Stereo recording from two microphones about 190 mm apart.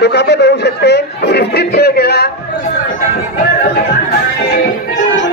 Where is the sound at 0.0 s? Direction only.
65° left (ahead or behind).